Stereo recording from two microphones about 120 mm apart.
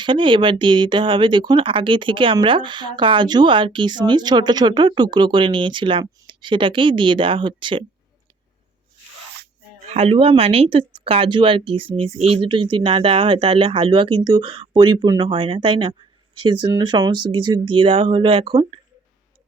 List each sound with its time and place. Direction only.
0.0 s speech: 40° right (ahead or behind)
9.9 s speech: 55° right (ahead or behind)